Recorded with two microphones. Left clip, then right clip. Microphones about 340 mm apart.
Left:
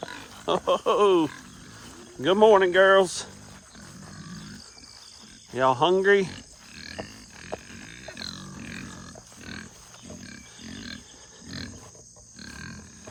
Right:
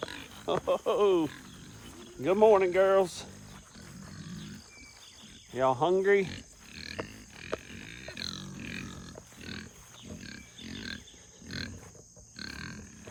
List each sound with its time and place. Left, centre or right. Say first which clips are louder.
0.4 s speech: left 6 dB; left
2.2 s speech: left 5 dB; left
4.1 s a sound: left 3 dB; centre
5.5 s speech: left 5 dB; left
6.3 s pig: left 2 dB; centre
12.4 s grunt: even; centre